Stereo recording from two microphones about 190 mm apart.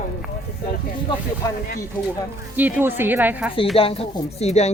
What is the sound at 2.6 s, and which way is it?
Speech, 10° right (ahead or behind).